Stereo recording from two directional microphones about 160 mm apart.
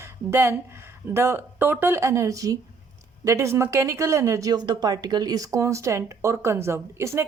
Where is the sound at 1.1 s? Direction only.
15° right (ahead or behind).